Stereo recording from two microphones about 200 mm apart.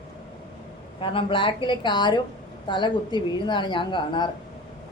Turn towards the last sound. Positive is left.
turn(degrees=25)  # may be behind; listen again after turning